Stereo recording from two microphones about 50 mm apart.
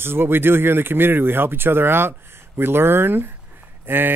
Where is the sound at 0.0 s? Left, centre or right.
Right.